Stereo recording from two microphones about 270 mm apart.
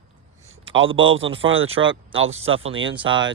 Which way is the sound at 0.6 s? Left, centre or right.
Right.